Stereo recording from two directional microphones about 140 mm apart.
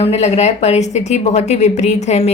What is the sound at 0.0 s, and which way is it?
Speech, 50° left (ahead or behind).